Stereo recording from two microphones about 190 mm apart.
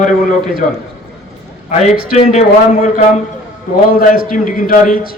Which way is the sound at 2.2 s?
35° left (ahead or behind).